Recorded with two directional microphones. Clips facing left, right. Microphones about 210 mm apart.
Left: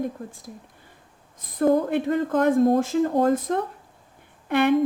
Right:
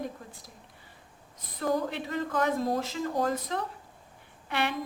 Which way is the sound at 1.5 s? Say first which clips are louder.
Left 9 dB; 55° left (ahead or behind).